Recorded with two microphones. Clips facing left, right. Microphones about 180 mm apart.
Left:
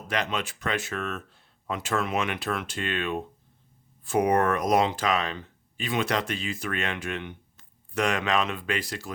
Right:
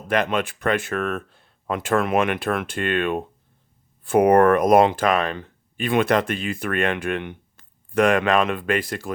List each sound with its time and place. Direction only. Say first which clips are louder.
0.1 s speech: right 8 dB; 55° right (ahead or behind)